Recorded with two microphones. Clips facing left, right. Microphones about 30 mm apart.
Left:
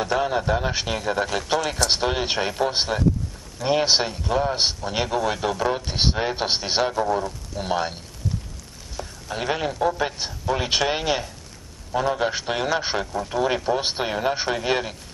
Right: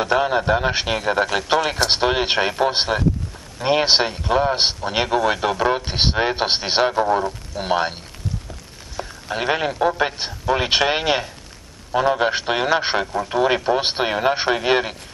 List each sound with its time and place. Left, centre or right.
0.0 s a man's voice: right
8.9 s a man's voice: right